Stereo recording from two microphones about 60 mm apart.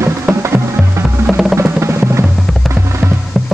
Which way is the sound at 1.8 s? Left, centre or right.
Right.